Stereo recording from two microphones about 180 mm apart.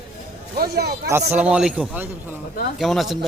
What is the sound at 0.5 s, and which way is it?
Speech, 60° right (ahead or behind).